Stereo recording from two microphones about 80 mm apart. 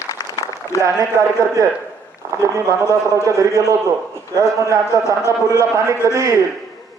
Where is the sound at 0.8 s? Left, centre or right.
Right.